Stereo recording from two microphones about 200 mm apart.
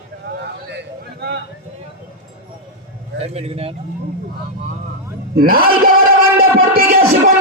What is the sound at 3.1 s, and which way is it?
Speech, 30° right (ahead or behind).